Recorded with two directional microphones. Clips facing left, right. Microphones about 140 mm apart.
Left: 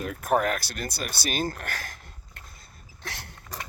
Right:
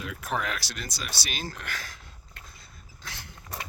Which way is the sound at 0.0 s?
50° left (ahead or behind).